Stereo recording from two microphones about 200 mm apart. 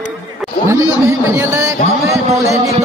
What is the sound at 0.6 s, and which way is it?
A man's voice, 15° right (ahead or behind).